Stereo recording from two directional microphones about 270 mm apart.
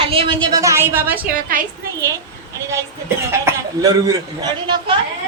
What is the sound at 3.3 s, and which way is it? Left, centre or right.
A man's voice, centre.